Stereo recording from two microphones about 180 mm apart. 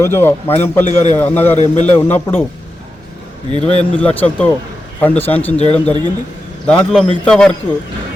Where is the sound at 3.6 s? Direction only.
35° left (ahead or behind).